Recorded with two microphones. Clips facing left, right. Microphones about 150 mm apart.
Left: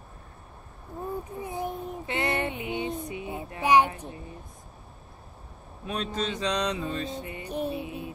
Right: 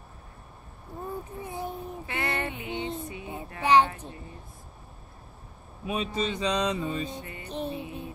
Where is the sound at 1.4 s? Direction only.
20° left (ahead or behind).